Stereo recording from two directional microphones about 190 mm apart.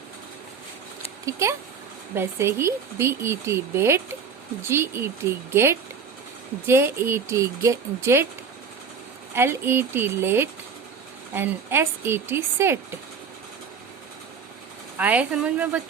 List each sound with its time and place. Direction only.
1.2 s speech: 15° right (ahead or behind)
9.3 s speech: 10° right (ahead or behind)
14.9 s speech: 10° right (ahead or behind)